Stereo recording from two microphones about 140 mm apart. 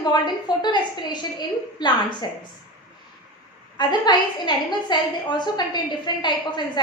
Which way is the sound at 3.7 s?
30° left (ahead or behind).